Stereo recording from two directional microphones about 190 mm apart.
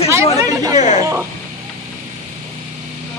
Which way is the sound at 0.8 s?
40° left (ahead or behind).